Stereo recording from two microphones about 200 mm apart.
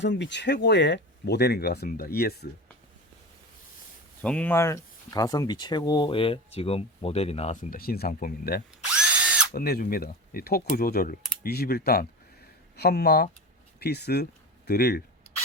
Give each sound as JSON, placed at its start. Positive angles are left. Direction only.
{"t": 0.0, "sound": "speech", "side_deg": 60}
{"t": 4.2, "sound": "speech", "side_deg": 5}
{"t": 9.0, "sound": "drill", "side_deg": -5}
{"t": 9.5, "sound": "speech", "side_deg": 50}